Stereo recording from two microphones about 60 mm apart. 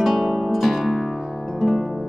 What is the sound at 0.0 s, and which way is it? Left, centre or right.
Music, centre.